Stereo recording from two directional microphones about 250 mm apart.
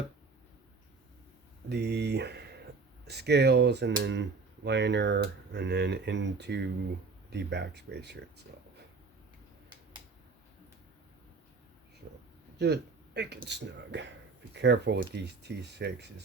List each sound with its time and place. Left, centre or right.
1.7 s speech: right
12.5 s speech: right